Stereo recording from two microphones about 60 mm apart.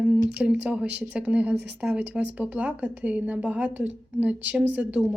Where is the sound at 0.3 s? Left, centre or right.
Right.